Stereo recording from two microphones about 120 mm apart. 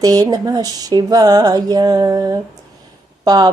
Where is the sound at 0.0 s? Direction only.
30° right (ahead or behind).